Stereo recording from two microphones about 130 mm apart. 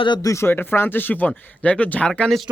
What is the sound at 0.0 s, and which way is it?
Speech, 30° left (ahead or behind).